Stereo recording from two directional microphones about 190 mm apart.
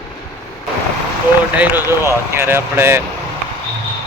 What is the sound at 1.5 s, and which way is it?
Speech, 10° right (ahead or behind).